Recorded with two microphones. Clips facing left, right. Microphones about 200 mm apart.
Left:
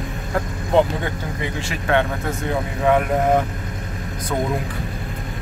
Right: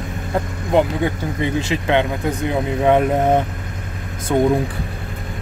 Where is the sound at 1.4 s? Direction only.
20° right (ahead or behind).